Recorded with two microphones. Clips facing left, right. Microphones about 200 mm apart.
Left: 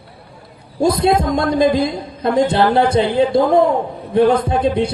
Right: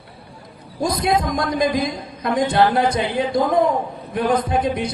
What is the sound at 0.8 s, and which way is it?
A man's voice, 30° left (ahead or behind).